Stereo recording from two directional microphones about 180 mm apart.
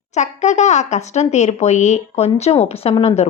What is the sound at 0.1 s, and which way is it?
Speech, 40° left (ahead or behind).